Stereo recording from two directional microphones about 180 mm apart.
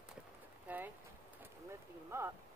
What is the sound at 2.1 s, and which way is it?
Speech, 15° right (ahead or behind).